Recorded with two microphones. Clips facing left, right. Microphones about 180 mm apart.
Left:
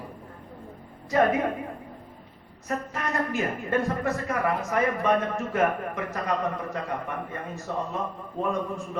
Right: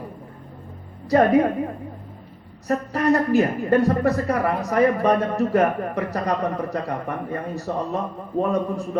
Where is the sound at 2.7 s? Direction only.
35° right (ahead or behind).